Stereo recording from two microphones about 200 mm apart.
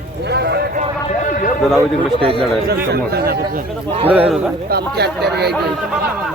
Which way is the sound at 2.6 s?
50° right (ahead or behind).